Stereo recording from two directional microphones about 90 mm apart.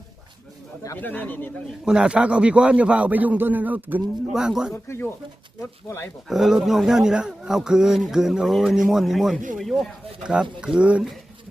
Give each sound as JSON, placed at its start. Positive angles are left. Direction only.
{"t": 0.9, "sound": "speech", "side_deg": 20}
{"t": 1.8, "sound": "a man's voice", "side_deg": -10}
{"t": 4.3, "sound": "a man's voice", "side_deg": -5}
{"t": 4.7, "sound": "speech", "side_deg": 30}
{"t": 6.2, "sound": "speech", "side_deg": -5}
{"t": 10.2, "sound": "a man's voice", "side_deg": -10}